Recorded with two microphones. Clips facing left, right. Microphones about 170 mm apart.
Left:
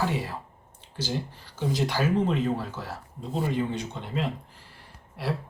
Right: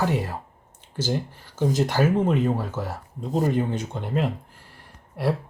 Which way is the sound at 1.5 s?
45° right (ahead or behind).